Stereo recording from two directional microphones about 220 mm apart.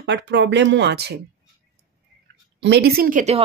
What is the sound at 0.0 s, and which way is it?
Speech, 55° right (ahead or behind).